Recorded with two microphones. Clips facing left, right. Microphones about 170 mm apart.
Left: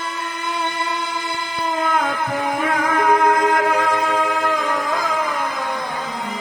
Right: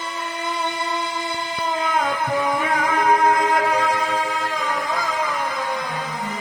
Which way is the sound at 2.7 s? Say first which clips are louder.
Left 2 dB; 50° left (ahead or behind).